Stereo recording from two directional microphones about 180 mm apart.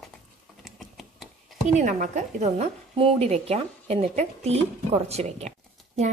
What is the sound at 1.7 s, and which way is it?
A woman's voice, 40° right (ahead or behind).